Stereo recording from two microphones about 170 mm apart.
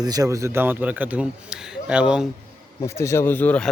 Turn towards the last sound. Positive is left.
turn(degrees=10)  # may be behind; listen again after turning